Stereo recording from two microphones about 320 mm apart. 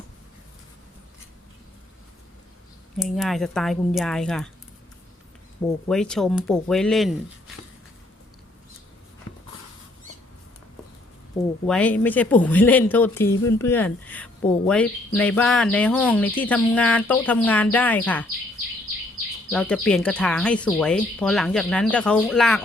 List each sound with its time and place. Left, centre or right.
3.0 s speech: centre
5.9 s speech: centre
11.6 s speech: centre
19.5 s speech: centre